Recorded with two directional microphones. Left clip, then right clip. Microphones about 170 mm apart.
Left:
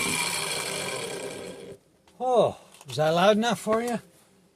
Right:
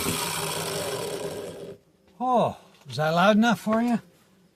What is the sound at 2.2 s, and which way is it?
Speech, 10° left (ahead or behind).